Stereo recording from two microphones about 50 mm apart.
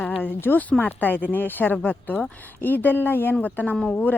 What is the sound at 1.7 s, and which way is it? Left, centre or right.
Speech, left.